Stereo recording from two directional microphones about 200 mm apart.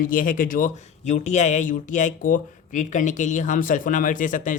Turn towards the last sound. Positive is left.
turn(degrees=40)  # may be behind; listen again after turning